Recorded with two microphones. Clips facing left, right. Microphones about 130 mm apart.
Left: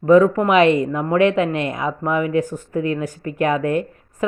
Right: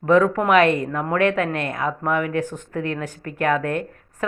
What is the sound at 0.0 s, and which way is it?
Speech, 10° left (ahead or behind).